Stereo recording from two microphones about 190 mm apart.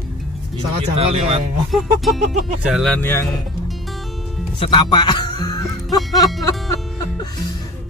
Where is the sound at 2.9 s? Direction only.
10° left (ahead or behind).